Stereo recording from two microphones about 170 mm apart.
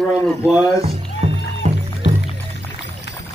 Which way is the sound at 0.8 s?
35° right (ahead or behind).